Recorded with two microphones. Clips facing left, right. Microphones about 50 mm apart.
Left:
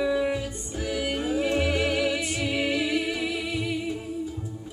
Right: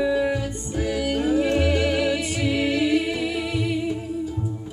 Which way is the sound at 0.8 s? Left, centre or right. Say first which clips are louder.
Right 4 dB; right.